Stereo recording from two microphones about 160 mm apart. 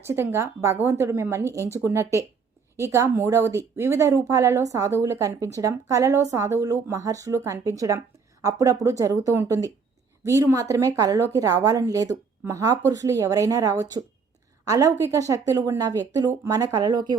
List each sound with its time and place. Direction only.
0.0 s a woman's voice: 15° right (ahead or behind)